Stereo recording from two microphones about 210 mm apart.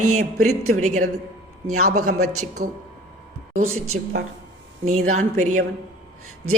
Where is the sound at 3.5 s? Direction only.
75° right (ahead or behind).